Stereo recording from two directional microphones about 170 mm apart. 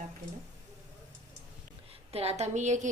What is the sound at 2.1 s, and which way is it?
Speech, 40° right (ahead or behind).